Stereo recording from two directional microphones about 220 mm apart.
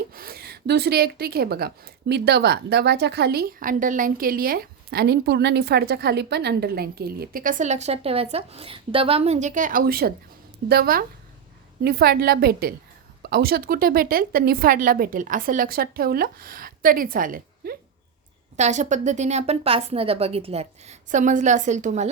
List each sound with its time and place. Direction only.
0.1 s a woman's voice: 45° right (ahead or behind)